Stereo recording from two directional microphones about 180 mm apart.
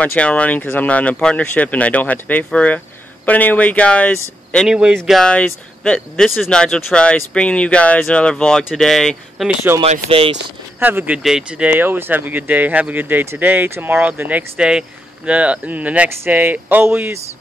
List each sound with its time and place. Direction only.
0.0 s speech: 5° left (ahead or behind)
9.8 s speech: 30° right (ahead or behind)
10.8 s speech: 10° right (ahead or behind)